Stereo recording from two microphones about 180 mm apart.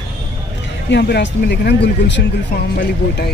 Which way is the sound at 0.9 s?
70° left (ahead or behind).